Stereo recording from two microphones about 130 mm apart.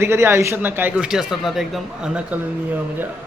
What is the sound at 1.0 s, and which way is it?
Speech, 5° right (ahead or behind).